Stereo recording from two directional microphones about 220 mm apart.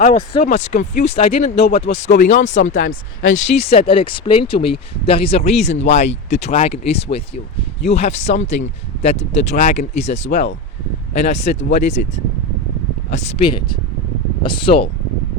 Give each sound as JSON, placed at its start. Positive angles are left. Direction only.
{"t": 0.0, "sound": "speech", "side_deg": 30}
{"t": 1.1, "sound": "speech", "side_deg": 25}
{"t": 2.8, "sound": "speech", "side_deg": 60}
{"t": 3.3, "sound": "speech", "side_deg": 30}
{"t": 13.1, "sound": "speech", "side_deg": 25}